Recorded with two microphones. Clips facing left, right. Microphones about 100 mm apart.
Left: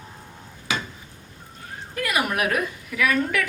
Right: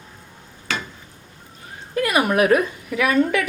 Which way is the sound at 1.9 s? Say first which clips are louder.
Right 6 dB; 30° right (ahead or behind).